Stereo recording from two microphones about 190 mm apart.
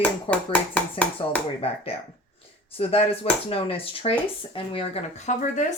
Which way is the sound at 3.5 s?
30° left (ahead or behind).